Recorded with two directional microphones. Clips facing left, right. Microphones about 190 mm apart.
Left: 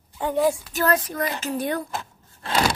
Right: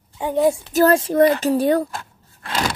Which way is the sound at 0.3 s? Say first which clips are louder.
Right 4 dB; 25° right (ahead or behind).